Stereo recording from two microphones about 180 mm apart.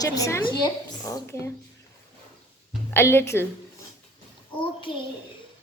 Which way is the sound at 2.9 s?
15° left (ahead or behind).